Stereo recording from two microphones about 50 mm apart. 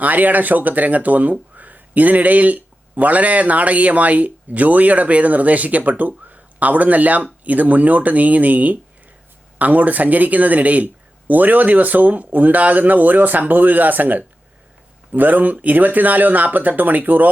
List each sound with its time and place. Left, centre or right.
0.0 s speech: right